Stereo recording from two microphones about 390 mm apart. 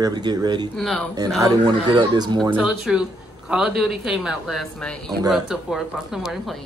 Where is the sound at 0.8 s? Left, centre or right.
Centre.